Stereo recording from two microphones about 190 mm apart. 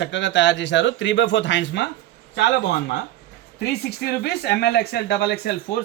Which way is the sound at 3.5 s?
60° left (ahead or behind).